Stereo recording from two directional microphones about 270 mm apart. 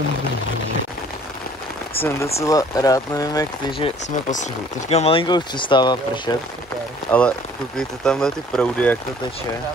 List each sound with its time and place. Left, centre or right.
2.0 s speech: centre
4.3 s speech: left
7.1 s speech: centre